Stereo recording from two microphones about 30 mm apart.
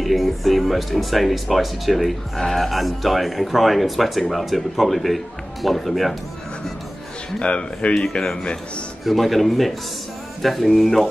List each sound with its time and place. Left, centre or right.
0.0 s speech: centre
7.3 s speech: left
9.0 s speech: centre